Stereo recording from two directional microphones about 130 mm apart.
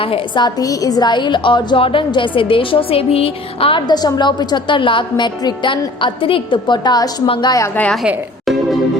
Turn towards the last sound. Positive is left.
turn(degrees=30)  # may be behind; listen again after turning